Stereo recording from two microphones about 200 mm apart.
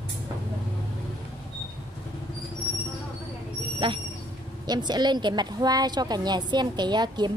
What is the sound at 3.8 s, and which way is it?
A woman's voice, 25° right (ahead or behind).